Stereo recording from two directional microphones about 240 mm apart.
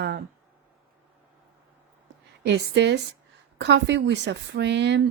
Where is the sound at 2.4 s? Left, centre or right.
Right.